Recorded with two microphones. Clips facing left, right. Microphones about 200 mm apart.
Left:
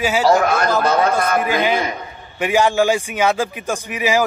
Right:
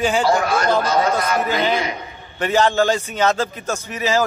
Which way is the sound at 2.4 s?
10° left (ahead or behind).